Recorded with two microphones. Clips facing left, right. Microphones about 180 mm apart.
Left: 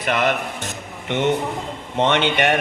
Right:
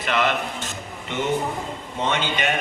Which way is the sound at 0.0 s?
50° left (ahead or behind).